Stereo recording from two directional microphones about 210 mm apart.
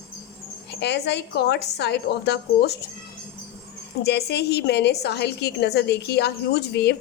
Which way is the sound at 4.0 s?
50° left (ahead or behind).